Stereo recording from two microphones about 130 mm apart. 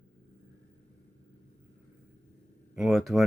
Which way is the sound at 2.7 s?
Centre (ahead or behind).